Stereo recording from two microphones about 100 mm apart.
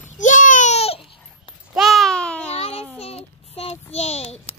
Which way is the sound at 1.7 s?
Centre (ahead or behind).